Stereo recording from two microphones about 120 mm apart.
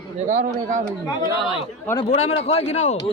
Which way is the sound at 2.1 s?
60° left (ahead or behind).